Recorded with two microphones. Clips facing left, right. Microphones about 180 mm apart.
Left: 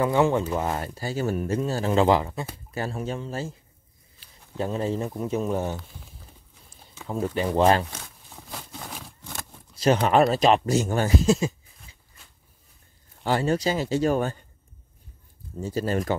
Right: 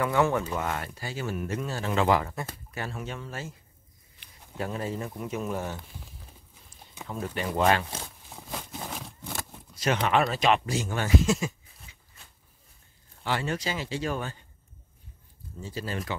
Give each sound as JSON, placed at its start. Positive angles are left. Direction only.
{"t": 0.0, "sound": "speech", "side_deg": 25}
{"t": 4.6, "sound": "a man's voice", "side_deg": 25}
{"t": 7.1, "sound": "speech", "side_deg": 35}
{"t": 9.8, "sound": "speech", "side_deg": 35}
{"t": 13.2, "sound": "speech", "side_deg": 40}
{"t": 15.5, "sound": "speech", "side_deg": 45}